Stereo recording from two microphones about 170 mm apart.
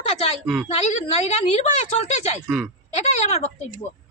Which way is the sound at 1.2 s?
40° left (ahead or behind).